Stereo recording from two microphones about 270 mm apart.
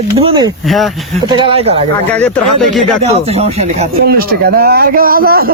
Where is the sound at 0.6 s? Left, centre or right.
Centre.